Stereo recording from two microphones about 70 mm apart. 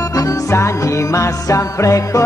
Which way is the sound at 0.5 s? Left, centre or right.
Left.